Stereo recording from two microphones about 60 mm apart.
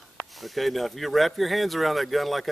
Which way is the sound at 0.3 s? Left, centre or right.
Centre.